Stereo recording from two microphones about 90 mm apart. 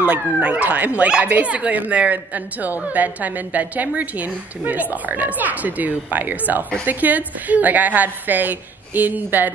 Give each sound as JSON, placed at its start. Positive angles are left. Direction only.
{"t": 0.0, "sound": "a woman's voice", "side_deg": -15}